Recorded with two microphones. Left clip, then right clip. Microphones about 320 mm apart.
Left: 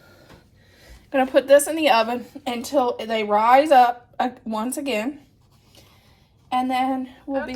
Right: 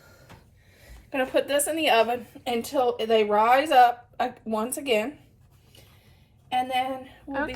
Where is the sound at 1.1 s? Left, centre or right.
Left.